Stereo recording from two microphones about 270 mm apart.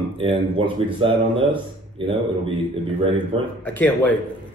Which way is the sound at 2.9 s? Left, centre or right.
Right.